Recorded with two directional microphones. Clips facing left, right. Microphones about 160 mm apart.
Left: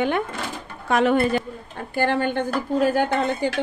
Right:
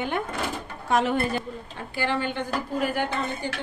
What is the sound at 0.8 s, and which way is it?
Speech, 70° left (ahead or behind).